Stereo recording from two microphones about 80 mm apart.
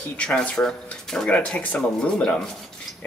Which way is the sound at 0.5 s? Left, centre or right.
Centre.